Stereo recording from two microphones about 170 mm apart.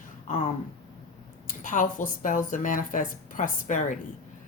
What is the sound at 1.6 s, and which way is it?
Speech, 50° left (ahead or behind).